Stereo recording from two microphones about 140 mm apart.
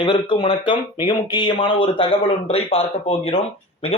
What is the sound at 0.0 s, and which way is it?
Speech, 35° left (ahead or behind).